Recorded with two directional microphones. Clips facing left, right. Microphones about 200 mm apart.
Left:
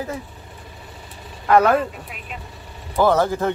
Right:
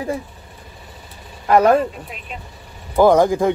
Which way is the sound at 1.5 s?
35° right (ahead or behind).